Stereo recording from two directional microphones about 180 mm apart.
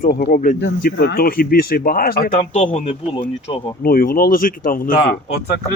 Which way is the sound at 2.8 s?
30° left (ahead or behind).